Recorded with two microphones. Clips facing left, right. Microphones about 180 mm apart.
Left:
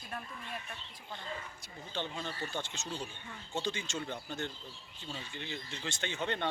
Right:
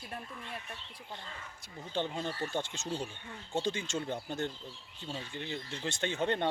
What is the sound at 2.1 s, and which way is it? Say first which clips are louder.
Speech: right 4 dB; 45° right (ahead or behind).